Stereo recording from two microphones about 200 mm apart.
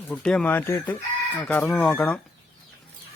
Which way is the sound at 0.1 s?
5° left (ahead or behind).